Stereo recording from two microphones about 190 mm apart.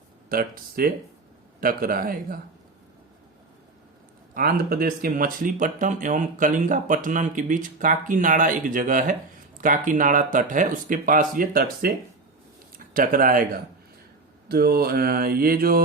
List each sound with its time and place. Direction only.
0.3 s speech: 50° right (ahead or behind)
4.4 s speech: 50° right (ahead or behind)